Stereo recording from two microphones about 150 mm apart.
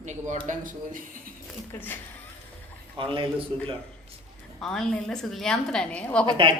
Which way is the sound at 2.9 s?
35° right (ahead or behind).